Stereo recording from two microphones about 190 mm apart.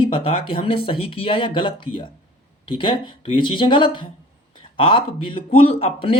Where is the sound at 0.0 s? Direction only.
30° left (ahead or behind).